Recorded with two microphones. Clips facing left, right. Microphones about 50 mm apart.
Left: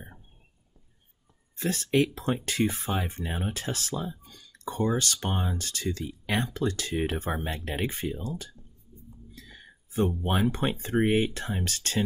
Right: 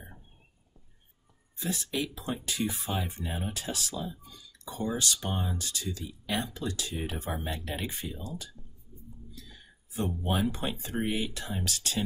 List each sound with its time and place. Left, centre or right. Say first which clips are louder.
1.6 s speech: left 8 dB; left